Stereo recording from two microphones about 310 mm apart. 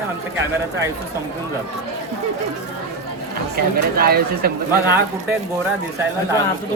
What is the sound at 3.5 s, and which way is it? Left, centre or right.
Speech, right.